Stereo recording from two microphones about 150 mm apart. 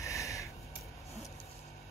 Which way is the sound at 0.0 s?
20° left (ahead or behind).